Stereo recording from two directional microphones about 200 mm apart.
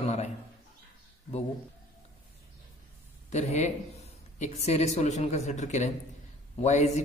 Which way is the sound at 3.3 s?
35° left (ahead or behind).